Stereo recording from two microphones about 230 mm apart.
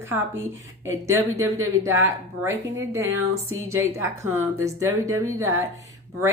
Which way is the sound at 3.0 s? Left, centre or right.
Right.